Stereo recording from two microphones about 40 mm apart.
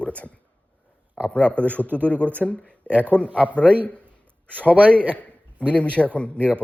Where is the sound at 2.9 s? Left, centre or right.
Right.